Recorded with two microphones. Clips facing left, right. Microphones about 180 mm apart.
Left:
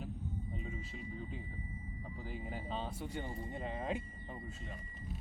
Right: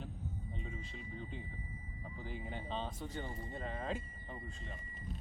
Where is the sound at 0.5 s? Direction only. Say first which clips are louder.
Left 2 dB; 5° left (ahead or behind).